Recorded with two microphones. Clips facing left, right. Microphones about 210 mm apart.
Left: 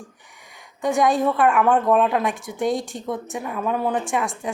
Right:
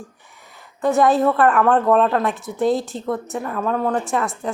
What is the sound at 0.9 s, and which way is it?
A woman's voice, 15° left (ahead or behind).